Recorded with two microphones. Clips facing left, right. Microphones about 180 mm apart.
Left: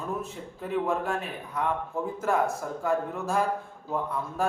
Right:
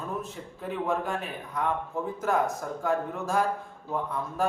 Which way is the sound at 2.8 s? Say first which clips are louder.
Left 1 dB; 5° left (ahead or behind).